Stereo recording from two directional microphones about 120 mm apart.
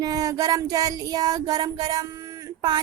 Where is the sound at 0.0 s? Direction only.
30° right (ahead or behind).